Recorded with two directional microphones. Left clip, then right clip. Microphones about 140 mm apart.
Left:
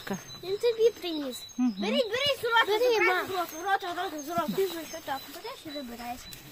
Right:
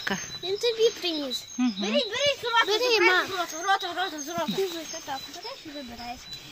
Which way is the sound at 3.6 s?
70° right (ahead or behind).